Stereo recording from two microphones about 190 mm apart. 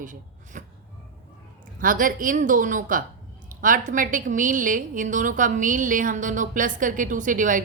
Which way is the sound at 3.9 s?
45° right (ahead or behind).